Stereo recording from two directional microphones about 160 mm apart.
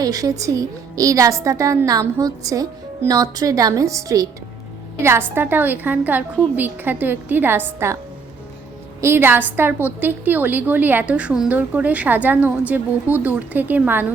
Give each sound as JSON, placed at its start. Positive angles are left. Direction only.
{"t": 0.0, "sound": "a woman's voice", "side_deg": -20}
{"t": 9.0, "sound": "a woman's voice", "side_deg": -15}